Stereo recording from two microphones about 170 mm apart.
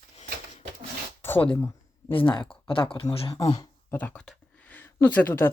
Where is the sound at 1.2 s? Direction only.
10° left (ahead or behind).